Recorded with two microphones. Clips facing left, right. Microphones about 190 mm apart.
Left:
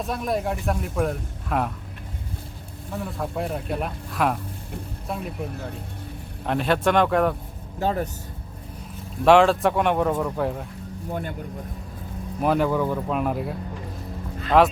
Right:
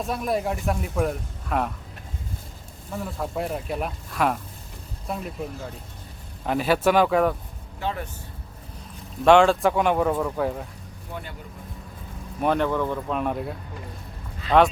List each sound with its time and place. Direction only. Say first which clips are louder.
0.0 s speech: even; centre (ahead or behind)
2.9 s speech: even; centre (ahead or behind)
7.8 s speech: left 5 dB; 40° left (ahead or behind)
9.2 s speech: even; centre (ahead or behind)
11.1 s speech: left 6 dB; 50° left (ahead or behind)
12.4 s speech: left 1 dB; 5° left (ahead or behind)